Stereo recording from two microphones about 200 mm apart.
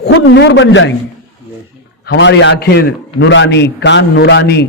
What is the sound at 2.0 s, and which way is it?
A man's voice, 60° left (ahead or behind).